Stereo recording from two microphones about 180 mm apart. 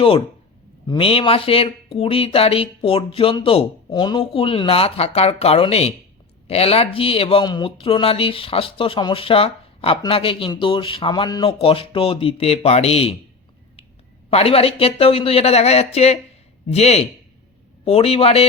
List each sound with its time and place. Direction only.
0.9 s speech: 30° left (ahead or behind)
14.3 s speech: 35° left (ahead or behind)